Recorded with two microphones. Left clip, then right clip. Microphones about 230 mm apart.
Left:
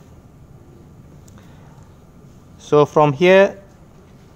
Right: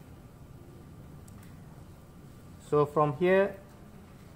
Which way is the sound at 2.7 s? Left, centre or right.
Left.